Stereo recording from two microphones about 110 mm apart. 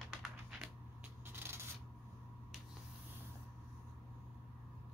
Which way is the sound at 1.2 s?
20° right (ahead or behind).